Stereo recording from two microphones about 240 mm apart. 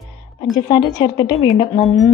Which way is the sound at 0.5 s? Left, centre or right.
Centre.